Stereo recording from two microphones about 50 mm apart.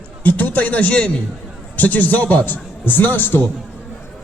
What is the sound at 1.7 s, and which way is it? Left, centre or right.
Speech, left.